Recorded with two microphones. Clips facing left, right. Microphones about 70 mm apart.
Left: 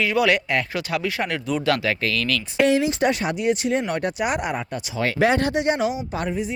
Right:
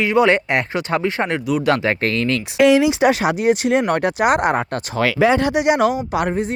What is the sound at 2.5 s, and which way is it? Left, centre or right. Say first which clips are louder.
Speech: right 6 dB; right.